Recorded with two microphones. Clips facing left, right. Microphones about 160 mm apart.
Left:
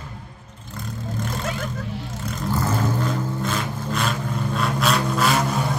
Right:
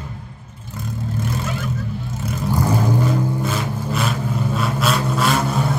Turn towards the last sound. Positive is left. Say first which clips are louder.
# right 2 dB
turn(degrees=0)  # may be behind; listen again after turning